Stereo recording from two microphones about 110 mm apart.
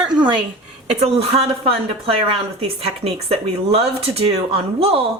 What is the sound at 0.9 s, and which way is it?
Speech, 65° right (ahead or behind).